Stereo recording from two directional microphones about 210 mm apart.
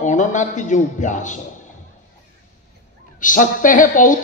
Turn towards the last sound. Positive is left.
turn(degrees=40)  # may be behind; listen again after turning